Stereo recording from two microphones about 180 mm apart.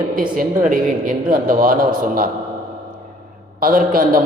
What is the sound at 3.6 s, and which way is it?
Speech, 55° right (ahead or behind).